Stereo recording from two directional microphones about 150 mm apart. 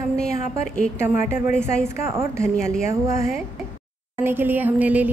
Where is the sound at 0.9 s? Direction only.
15° right (ahead or behind).